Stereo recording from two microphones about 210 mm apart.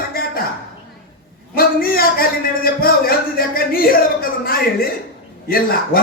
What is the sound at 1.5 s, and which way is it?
Speech, 45° left (ahead or behind).